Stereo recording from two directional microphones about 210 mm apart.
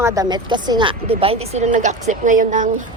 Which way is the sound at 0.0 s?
15° right (ahead or behind).